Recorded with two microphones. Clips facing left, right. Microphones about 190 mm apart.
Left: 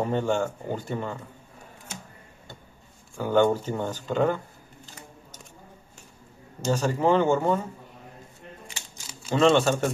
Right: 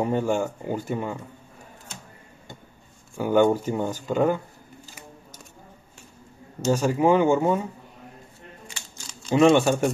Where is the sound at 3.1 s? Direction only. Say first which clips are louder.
Right 2 dB; 10° right (ahead or behind).